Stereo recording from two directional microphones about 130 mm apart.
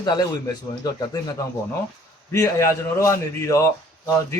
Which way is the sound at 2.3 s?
20° left (ahead or behind).